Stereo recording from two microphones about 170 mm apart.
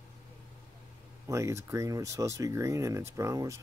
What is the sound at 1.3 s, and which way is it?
Speech, 15° right (ahead or behind).